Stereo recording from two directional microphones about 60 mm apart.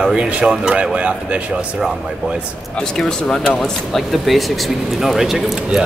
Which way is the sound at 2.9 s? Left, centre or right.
Centre.